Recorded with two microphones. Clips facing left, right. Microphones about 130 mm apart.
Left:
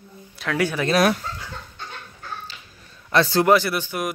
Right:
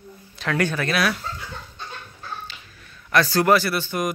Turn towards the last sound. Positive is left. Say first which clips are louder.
# right 1 dB
turn(degrees=5)  # may be behind; listen again after turning